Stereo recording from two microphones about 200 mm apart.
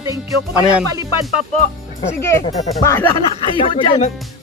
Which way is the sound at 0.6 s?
5° right (ahead or behind).